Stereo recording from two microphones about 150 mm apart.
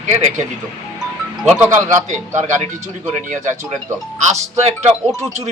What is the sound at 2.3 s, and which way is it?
Speech, 55° right (ahead or behind).